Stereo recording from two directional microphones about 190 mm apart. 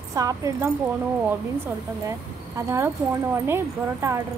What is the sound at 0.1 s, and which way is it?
Speech, 15° right (ahead or behind).